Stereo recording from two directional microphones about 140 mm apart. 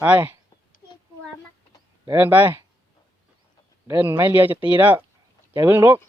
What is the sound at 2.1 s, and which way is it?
Speech, 10° right (ahead or behind).